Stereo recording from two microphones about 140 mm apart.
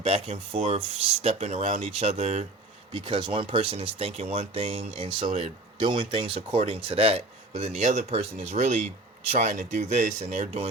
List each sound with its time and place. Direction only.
0.0 s speech: 45° right (ahead or behind)
2.9 s speech: 35° right (ahead or behind)
5.0 s speech: 35° right (ahead or behind); by 10.7 s 50° right (ahead or behind)